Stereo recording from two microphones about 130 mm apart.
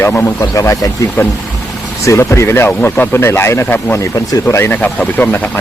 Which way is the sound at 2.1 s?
20° left (ahead or behind).